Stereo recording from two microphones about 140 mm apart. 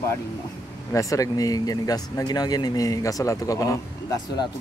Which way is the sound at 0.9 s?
25° left (ahead or behind).